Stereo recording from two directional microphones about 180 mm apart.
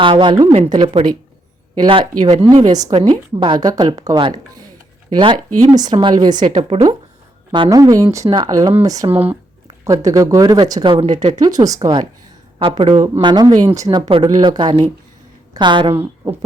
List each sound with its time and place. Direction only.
0.0 s speech: 25° right (ahead or behind)
11.3 s a woman's voice: 20° right (ahead or behind)